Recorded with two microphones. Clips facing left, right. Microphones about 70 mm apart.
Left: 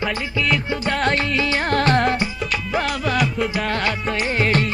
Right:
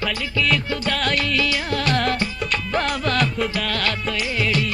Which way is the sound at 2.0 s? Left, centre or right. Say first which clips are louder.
Left 3 dB; centre.